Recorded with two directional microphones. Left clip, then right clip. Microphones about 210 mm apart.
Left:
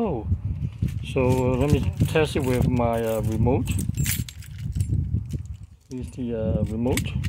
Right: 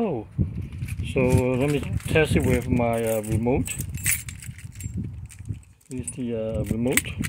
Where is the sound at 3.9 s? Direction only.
20° left (ahead or behind).